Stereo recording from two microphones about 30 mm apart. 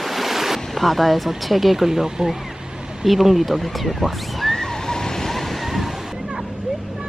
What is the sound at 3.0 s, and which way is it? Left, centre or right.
Speech, centre.